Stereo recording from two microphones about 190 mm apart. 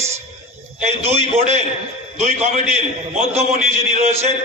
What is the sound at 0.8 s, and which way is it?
Speech, 35° right (ahead or behind).